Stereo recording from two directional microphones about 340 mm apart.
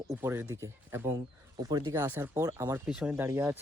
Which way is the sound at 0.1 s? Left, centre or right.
Centre.